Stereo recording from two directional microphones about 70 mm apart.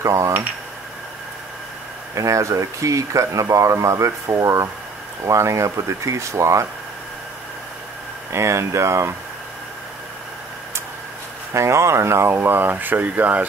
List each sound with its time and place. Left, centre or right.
0.0 s speech: right
2.1 s speech: right
8.3 s speech: right
11.5 s speech: right